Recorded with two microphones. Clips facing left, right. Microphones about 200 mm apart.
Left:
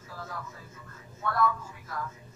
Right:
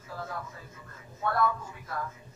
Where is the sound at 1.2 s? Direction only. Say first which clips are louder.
Even; 30° right (ahead or behind).